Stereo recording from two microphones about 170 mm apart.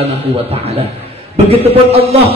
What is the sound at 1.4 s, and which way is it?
Speech, 35° right (ahead or behind).